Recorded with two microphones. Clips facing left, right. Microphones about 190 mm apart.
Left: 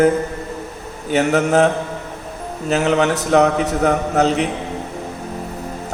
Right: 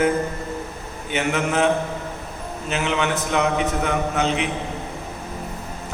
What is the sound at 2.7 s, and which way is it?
A man's voice, 40° left (ahead or behind).